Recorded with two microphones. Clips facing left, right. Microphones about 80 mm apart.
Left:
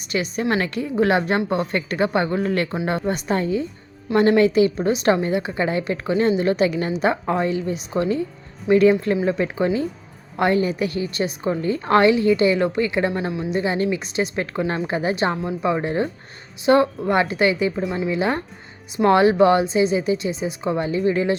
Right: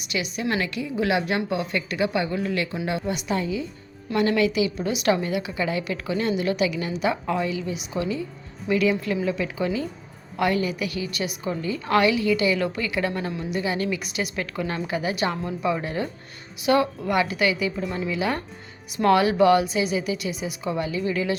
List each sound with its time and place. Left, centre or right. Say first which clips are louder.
0.0 s a woman's voice: left 4 dB; left